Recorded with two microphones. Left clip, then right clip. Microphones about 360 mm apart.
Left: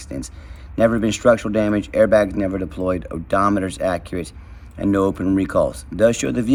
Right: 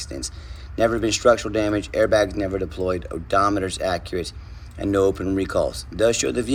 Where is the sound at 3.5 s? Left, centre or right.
Centre.